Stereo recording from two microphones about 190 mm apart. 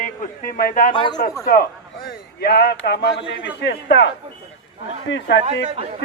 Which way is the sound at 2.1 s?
55° left (ahead or behind).